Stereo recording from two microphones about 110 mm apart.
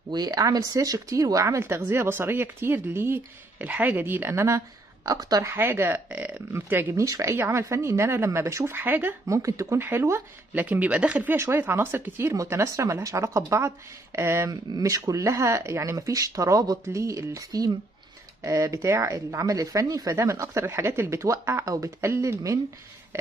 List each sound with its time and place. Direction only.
0.1 s speech: 35° right (ahead or behind)
5.5 s speech: 20° right (ahead or behind)